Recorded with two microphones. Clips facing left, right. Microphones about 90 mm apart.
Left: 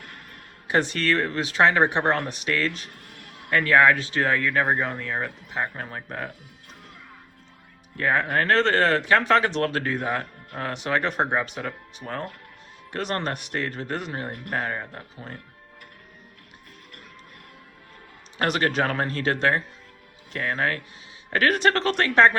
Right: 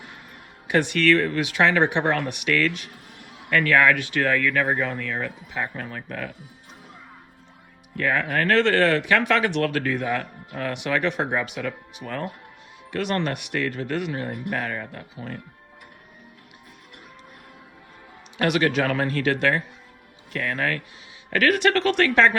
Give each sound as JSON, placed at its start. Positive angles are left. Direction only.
{"t": 0.7, "sound": "speech", "side_deg": 30}
{"t": 3.1, "sound": "a sound", "side_deg": 60}
{"t": 3.5, "sound": "speech", "side_deg": 30}
{"t": 7.9, "sound": "speech", "side_deg": 30}
{"t": 10.0, "sound": "speech", "side_deg": 45}
{"t": 11.2, "sound": "speech", "side_deg": 25}
{"t": 12.9, "sound": "speech", "side_deg": 35}
{"t": 14.6, "sound": "speech", "side_deg": 25}
{"t": 18.3, "sound": "speech", "side_deg": 40}